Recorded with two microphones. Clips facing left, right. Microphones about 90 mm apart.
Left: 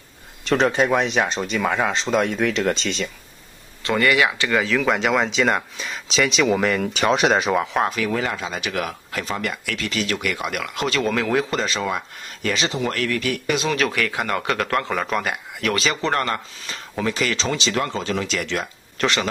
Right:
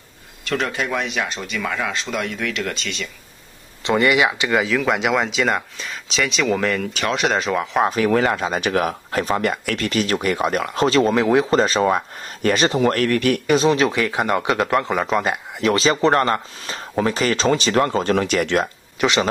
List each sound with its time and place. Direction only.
0.5 s speech: 30° left (ahead or behind)
3.8 s speech: 20° right (ahead or behind); by 7.8 s 5° left (ahead or behind)
7.9 s speech: 50° right (ahead or behind); by 11.4 s 25° right (ahead or behind)
11.5 s speech: 40° right (ahead or behind)
13.5 s speech: 35° right (ahead or behind)
13.7 s speech: 20° right (ahead or behind); by 18.7 s 55° right (ahead or behind)
18.9 s speech: 15° right (ahead or behind)